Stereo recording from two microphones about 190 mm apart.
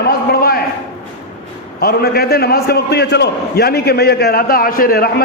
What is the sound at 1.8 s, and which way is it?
A man's voice, 55° left (ahead or behind).